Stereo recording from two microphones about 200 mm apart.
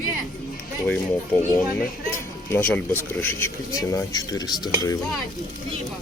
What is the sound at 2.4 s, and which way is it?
Speech, 10° left (ahead or behind).